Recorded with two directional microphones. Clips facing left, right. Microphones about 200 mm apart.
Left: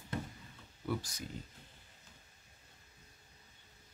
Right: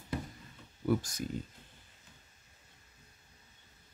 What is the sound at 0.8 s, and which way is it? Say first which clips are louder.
Speech: right 7 dB; 45° right (ahead or behind).